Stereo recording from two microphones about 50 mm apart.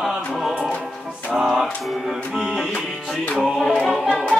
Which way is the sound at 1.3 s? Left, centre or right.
Centre.